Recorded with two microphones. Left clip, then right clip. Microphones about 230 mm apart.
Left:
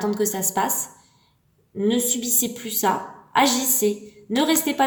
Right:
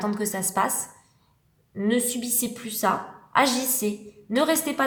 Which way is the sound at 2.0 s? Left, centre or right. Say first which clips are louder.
Left 4 dB; right.